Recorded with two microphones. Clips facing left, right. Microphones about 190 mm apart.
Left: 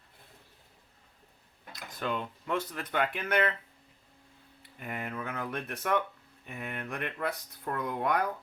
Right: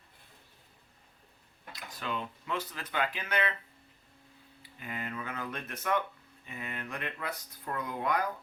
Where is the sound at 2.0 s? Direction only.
50° left (ahead or behind).